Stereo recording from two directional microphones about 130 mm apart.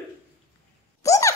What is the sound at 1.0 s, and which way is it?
Plop, 25° left (ahead or behind).